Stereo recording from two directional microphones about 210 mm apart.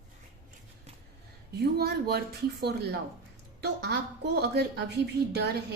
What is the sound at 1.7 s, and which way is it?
A woman's voice, 50° right (ahead or behind).